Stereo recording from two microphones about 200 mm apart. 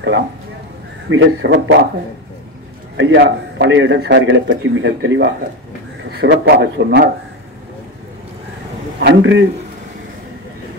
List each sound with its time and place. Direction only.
1.1 s a man's voice: 65° right (ahead or behind)
3.0 s a man's voice: 60° right (ahead or behind)
9.0 s a man's voice: 65° right (ahead or behind)